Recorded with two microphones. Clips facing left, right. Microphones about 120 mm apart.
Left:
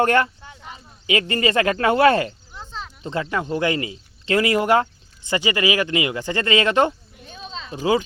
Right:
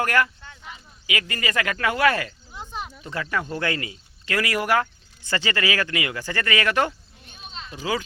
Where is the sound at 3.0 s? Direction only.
25° left (ahead or behind).